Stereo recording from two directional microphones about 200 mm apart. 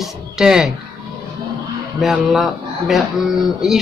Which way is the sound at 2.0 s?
Centre (ahead or behind).